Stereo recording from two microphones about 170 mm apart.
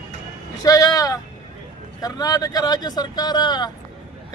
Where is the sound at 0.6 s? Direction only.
20° left (ahead or behind).